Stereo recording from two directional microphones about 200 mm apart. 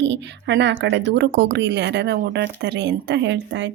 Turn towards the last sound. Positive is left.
turn(degrees=-65)  # may be behind; listen again after turning